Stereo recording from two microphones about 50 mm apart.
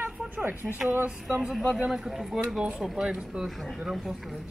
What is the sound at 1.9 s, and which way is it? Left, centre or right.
Speech, centre.